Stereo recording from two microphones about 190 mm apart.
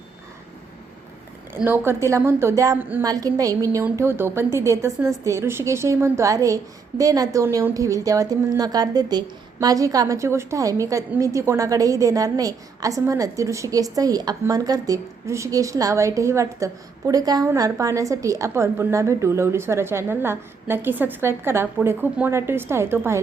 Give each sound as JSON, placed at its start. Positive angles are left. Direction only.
{"t": 1.6, "sound": "a woman's voice", "side_deg": -10}